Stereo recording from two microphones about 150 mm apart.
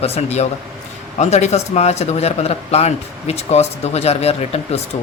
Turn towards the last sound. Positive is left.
turn(degrees=45)  # may be behind; listen again after turning